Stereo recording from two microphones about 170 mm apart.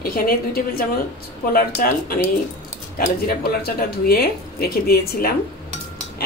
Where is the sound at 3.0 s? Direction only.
65° left (ahead or behind).